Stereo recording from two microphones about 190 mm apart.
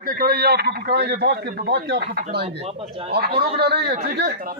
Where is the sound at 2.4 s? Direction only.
30° right (ahead or behind).